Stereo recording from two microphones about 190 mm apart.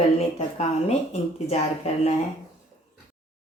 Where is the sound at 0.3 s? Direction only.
35° left (ahead or behind).